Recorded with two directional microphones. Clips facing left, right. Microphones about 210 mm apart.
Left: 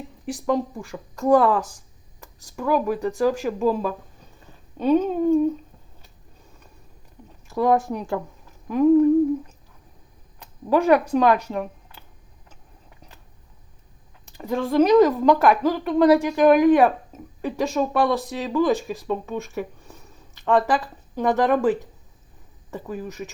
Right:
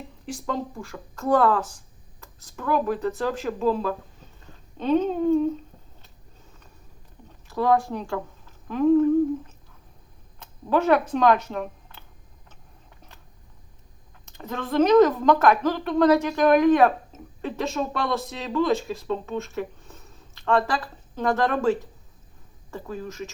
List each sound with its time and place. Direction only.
0.3 s speech: 15° left (ahead or behind)
7.5 s speech: 15° left (ahead or behind)
10.7 s a woman's voice: 10° left (ahead or behind)
14.3 s speech: 10° left (ahead or behind)